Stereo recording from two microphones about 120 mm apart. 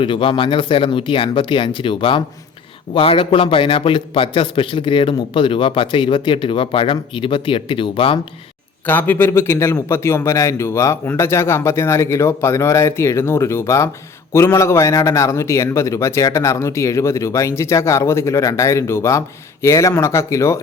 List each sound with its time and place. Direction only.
0.0 s a man's voice: 45° left (ahead or behind)
8.9 s a man's voice: 15° left (ahead or behind)